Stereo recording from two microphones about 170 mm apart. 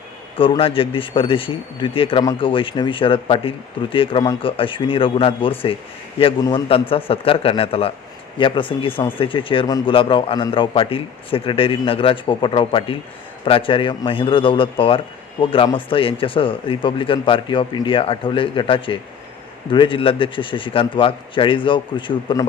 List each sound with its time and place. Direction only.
0.3 s a man's voice: 30° left (ahead or behind)